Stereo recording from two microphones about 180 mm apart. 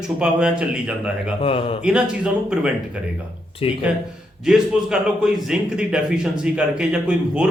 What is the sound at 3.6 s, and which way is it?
Speech, 30° left (ahead or behind).